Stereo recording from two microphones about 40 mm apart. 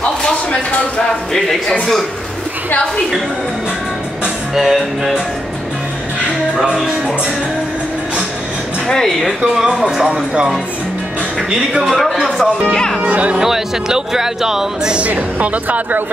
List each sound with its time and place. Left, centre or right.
4.6 s speech: centre
6.5 s speech: centre
8.8 s speech: centre
9.5 s speech: centre
11.8 s speech: centre
12.7 s speech: centre
13.0 s speech: right
13.4 s speech: centre
15.4 s speech: right